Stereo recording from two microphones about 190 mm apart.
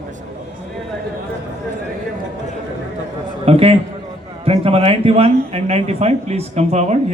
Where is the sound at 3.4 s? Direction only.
30° right (ahead or behind).